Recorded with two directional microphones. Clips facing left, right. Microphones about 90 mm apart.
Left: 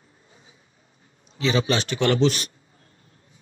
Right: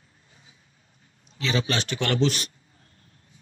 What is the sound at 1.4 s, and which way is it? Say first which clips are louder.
Speech: left 4 dB; 20° left (ahead or behind).